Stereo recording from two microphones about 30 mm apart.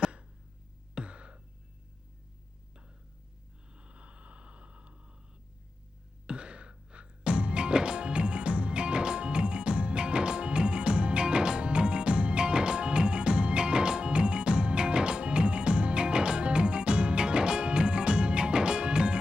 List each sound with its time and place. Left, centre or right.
1.0 s a sound: right
3.8 s vehicle: right
6.2 s music: right